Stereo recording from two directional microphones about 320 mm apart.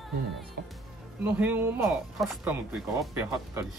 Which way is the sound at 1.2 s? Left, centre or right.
Centre.